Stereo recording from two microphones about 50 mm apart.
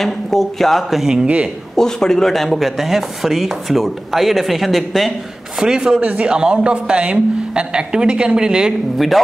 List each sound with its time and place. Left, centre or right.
0.0 s chopping: centre
1.2 s a man's voice: right
1.8 s chopping: centre
5.6 s a man's voice: centre
8.9 s chopping: centre